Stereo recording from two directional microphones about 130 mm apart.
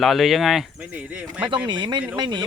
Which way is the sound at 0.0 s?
Centre (ahead or behind).